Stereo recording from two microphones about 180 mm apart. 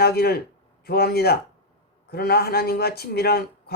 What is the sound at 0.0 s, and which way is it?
Speech, 60° left (ahead or behind).